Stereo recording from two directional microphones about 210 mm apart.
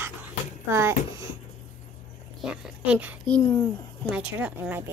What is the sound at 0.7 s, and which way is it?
Speech, 10° right (ahead or behind).